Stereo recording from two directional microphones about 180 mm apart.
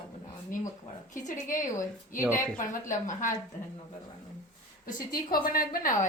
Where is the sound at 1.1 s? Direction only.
45° left (ahead or behind).